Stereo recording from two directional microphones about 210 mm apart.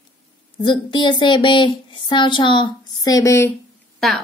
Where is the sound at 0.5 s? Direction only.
20° left (ahead or behind).